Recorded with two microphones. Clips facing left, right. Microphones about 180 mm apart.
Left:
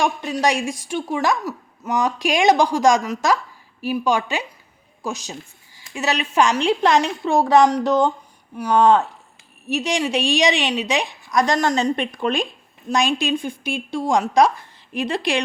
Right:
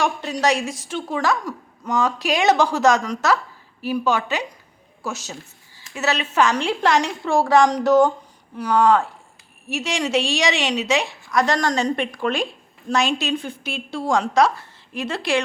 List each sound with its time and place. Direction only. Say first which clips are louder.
0.4 s a woman's voice: right 1 dB; 15° left (ahead or behind)
8.7 s a woman's voice: left 2 dB; 25° left (ahead or behind)